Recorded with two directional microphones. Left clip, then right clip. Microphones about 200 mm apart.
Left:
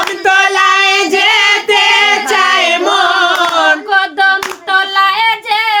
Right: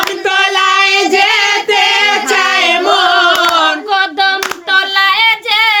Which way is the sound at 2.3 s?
25° left (ahead or behind).